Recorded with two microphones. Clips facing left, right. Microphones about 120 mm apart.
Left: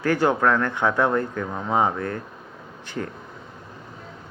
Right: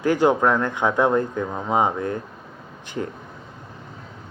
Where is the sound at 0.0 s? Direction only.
15° right (ahead or behind).